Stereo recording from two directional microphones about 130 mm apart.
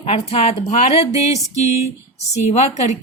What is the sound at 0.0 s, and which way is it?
A woman's voice, 50° left (ahead or behind).